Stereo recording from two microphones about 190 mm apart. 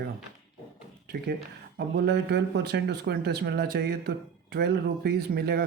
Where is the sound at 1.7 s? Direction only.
60° right (ahead or behind).